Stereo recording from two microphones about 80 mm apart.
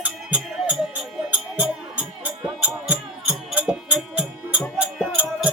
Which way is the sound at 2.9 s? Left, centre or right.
Centre.